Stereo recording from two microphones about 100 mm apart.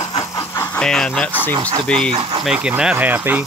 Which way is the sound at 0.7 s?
5° left (ahead or behind).